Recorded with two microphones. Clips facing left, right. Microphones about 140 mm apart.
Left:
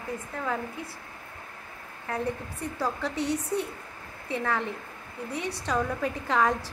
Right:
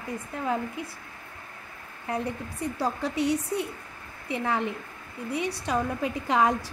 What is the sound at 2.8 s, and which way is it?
A woman's voice, 15° right (ahead or behind).